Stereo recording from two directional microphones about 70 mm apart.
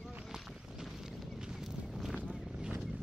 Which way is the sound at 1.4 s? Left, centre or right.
Centre.